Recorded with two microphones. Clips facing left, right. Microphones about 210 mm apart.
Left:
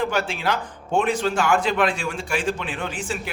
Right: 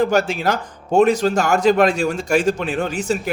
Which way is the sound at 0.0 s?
40° right (ahead or behind).